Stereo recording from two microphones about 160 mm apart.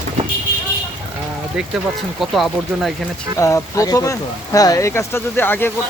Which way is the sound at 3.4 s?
20° left (ahead or behind).